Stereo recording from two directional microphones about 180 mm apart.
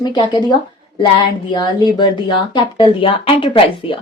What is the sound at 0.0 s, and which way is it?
Speech, 25° left (ahead or behind).